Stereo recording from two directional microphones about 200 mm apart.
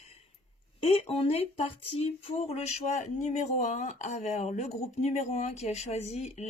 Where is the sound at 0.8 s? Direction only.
30° left (ahead or behind).